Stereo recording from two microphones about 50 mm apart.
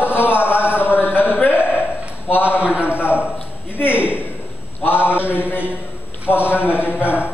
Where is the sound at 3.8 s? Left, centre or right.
Left.